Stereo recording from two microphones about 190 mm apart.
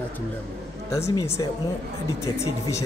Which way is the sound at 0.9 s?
15° left (ahead or behind).